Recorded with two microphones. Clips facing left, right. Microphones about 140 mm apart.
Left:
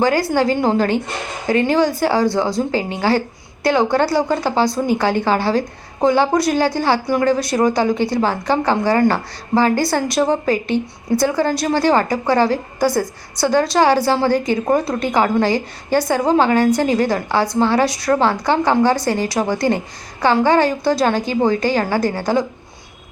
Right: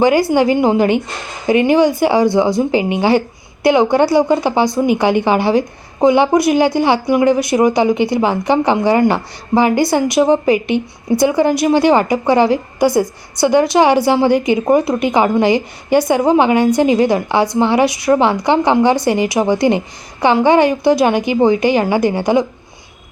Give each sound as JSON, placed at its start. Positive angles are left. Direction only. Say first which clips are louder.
{"t": 0.0, "sound": "speech", "louder": "right 4 dB", "side_deg": -15}